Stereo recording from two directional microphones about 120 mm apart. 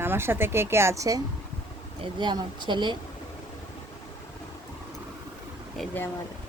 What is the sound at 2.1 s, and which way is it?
Speech, 40° right (ahead or behind).